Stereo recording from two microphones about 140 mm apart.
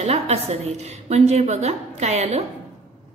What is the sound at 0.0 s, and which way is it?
Speech, 50° right (ahead or behind).